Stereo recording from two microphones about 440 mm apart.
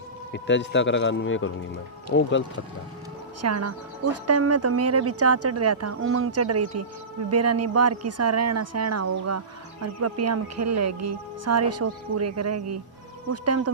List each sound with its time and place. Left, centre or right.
0.3 s a man's voice: left
3.4 s speech: right